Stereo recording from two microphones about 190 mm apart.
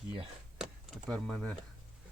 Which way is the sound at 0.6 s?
5° left (ahead or behind).